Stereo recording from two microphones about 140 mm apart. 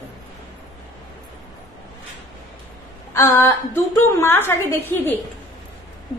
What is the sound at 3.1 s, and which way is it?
A woman's voice, 20° left (ahead or behind).